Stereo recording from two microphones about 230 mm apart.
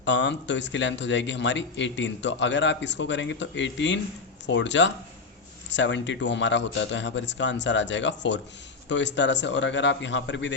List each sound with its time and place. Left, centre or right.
0.0 s speech: left